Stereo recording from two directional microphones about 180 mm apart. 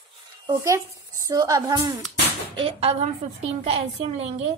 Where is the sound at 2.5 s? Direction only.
30° right (ahead or behind).